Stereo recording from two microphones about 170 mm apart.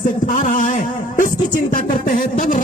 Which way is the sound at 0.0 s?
50° left (ahead or behind).